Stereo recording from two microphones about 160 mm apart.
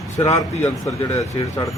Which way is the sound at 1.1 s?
20° left (ahead or behind).